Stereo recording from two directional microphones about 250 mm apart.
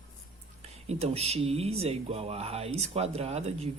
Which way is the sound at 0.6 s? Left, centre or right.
Right.